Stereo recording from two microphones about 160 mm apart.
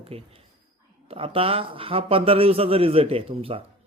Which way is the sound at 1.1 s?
35° right (ahead or behind).